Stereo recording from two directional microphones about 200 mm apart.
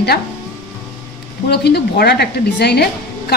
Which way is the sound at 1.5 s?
55° left (ahead or behind).